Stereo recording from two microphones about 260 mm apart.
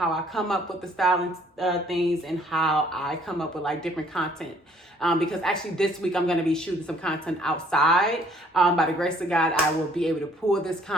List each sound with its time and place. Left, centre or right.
0.0 s speech: centre